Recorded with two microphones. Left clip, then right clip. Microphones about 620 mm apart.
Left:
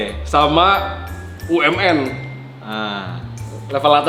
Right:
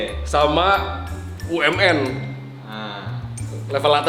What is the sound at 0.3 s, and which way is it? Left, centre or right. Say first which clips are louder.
Speech: left 4 dB; centre.